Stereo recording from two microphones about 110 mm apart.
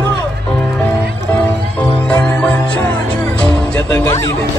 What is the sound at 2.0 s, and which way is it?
Music, 10° left (ahead or behind).